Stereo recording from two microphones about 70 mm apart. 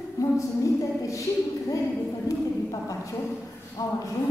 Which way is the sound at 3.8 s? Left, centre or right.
Left.